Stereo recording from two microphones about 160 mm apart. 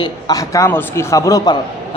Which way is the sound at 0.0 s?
20° left (ahead or behind).